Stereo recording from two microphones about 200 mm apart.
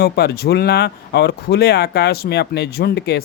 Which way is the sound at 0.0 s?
50° left (ahead or behind).